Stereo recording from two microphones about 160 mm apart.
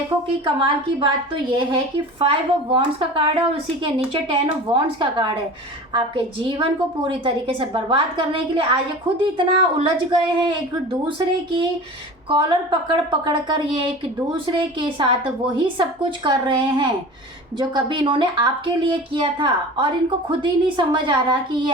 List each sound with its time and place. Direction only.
0.4 s a woman's voice: 30° right (ahead or behind)
6.6 s a woman's voice: 30° right (ahead or behind)
12.3 s a woman's voice: 30° right (ahead or behind)